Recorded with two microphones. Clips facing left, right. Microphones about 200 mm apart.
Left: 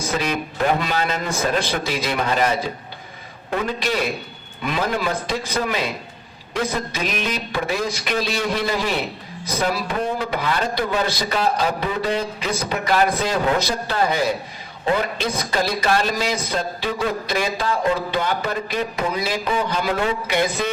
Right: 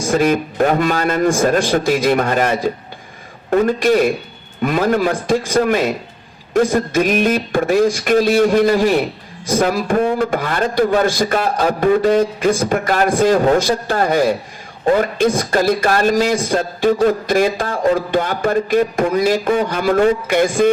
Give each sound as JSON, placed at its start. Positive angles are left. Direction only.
{"t": 0.0, "sound": "a man's voice", "side_deg": -50}